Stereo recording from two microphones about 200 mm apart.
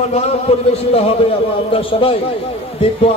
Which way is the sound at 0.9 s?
30° left (ahead or behind).